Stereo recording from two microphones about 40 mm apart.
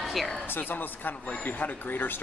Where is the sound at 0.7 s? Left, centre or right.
Left.